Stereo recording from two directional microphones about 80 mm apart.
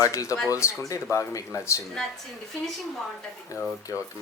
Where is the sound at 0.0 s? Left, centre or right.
Left.